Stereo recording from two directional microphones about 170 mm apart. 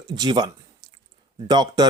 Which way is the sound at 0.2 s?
25° right (ahead or behind).